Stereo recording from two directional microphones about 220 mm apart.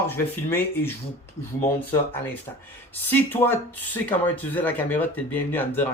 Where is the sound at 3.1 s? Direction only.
10° left (ahead or behind).